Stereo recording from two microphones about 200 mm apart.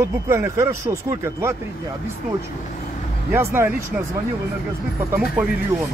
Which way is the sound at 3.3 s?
10° right (ahead or behind).